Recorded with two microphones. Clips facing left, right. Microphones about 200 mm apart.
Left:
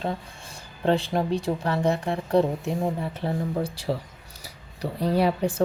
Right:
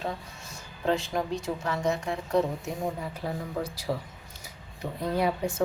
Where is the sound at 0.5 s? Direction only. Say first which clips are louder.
Left 4 dB; 30° left (ahead or behind).